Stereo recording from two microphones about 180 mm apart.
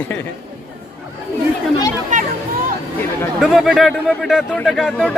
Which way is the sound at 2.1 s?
45° right (ahead or behind).